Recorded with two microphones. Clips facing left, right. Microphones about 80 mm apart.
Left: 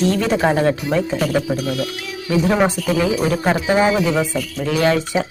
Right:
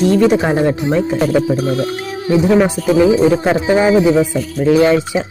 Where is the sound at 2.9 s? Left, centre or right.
Right.